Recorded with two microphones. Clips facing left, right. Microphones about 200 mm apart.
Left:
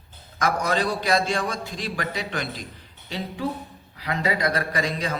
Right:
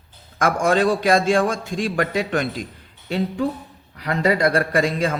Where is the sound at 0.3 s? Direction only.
50° right (ahead or behind).